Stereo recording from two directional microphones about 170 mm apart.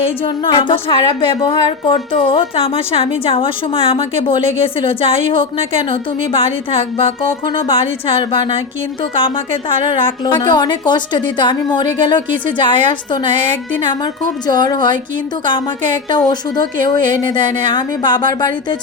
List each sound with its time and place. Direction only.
0.2 s a woman's voice: 30° left (ahead or behind)
16.3 s a woman's voice: 25° left (ahead or behind)